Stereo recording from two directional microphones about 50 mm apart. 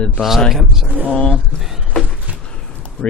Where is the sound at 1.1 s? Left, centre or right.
Left.